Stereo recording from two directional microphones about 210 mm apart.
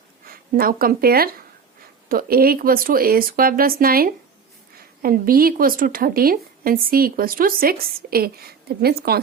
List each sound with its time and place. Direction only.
0.3 s speech: 45° right (ahead or behind)